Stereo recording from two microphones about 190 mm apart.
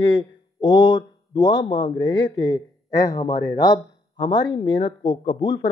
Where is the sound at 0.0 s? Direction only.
25° left (ahead or behind).